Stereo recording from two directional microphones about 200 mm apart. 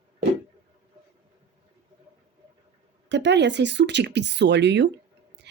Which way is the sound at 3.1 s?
60° right (ahead or behind).